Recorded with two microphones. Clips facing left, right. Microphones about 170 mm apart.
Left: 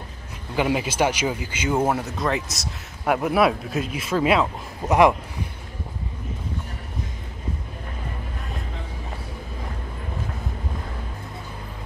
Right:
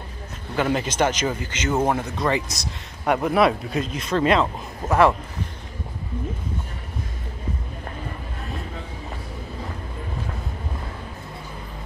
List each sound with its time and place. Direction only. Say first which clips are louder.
0.6 s speech: even; 10° left (ahead or behind)